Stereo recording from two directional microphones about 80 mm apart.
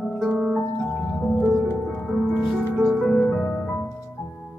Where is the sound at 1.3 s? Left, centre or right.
Left.